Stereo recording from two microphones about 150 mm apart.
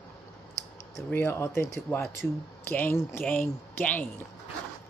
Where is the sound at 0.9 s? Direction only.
15° left (ahead or behind).